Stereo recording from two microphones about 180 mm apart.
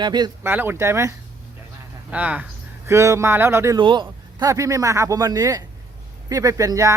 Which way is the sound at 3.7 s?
25° right (ahead or behind).